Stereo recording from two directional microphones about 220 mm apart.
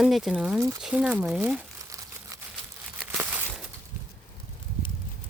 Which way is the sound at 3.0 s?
10° right (ahead or behind).